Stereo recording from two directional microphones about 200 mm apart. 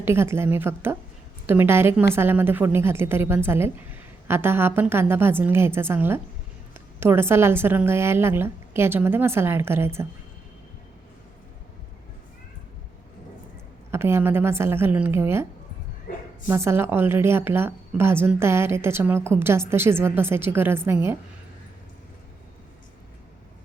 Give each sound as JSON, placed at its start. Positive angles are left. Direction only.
{"t": 0.0, "sound": "a woman's voice", "side_deg": -10}
{"t": 13.9, "sound": "a woman's voice", "side_deg": -10}
{"t": 16.1, "sound": "a woman's voice", "side_deg": 45}
{"t": 16.5, "sound": "a woman's voice", "side_deg": -15}